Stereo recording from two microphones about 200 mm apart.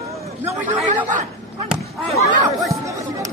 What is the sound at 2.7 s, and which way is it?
Chatter, 15° right (ahead or behind).